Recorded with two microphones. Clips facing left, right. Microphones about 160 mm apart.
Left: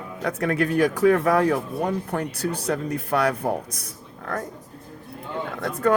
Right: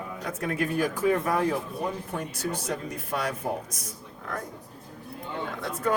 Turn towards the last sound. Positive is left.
turn(degrees=65)  # may be behind; listen again after turning